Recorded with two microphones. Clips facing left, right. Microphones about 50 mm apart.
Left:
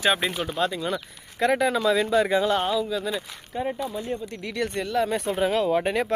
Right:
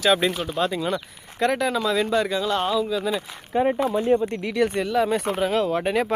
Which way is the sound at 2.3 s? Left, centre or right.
Left.